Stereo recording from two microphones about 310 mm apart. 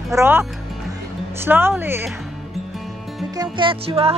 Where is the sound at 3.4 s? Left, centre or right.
Centre.